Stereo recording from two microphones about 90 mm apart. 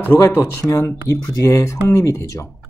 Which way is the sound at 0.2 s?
35° left (ahead or behind).